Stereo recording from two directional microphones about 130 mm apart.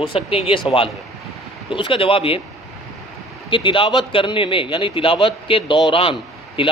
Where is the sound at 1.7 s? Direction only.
40° left (ahead or behind).